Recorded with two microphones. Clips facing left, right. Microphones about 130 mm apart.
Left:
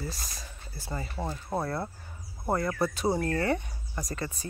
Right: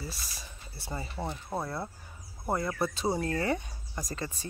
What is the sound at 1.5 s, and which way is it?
Speech, 20° left (ahead or behind).